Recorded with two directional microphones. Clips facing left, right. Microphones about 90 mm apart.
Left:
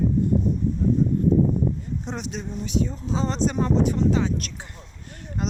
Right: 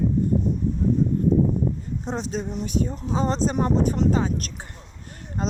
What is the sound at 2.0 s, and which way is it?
Speech, 35° right (ahead or behind).